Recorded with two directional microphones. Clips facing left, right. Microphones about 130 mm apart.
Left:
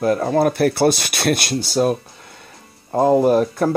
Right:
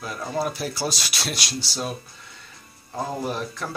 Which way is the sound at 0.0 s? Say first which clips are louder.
Left 11 dB; 55° left (ahead or behind).